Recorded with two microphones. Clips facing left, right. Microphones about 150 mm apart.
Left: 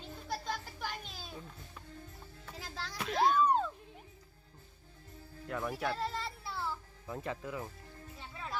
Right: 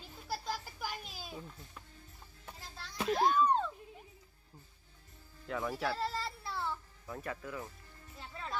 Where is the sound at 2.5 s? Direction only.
90° left.